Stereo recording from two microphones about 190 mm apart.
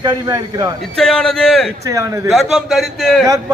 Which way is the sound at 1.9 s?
15° right (ahead or behind).